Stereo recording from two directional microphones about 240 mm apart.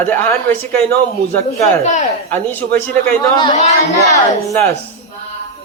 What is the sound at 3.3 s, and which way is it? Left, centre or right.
Speech, left.